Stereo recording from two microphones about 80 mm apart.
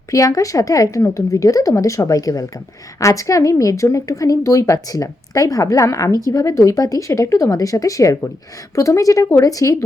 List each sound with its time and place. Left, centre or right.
0.1 s a woman's voice: left